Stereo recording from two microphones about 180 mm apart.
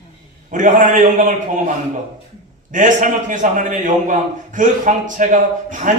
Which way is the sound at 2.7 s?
45° right (ahead or behind).